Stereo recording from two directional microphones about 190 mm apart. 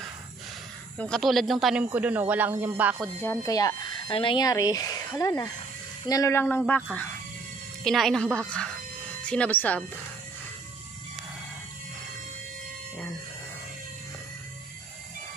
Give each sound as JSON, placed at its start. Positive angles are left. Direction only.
{"t": 0.9, "sound": "speech", "side_deg": 5}
{"t": 3.0, "sound": "speech", "side_deg": 10}